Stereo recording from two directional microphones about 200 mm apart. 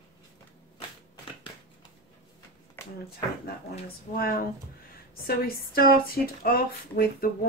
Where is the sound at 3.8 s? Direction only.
50° left (ahead or behind).